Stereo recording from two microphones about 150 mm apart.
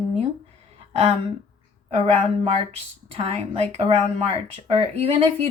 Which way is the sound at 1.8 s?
45° right (ahead or behind).